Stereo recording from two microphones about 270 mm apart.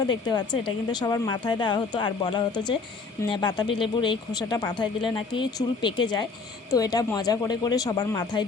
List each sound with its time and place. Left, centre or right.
0.0 s speech: centre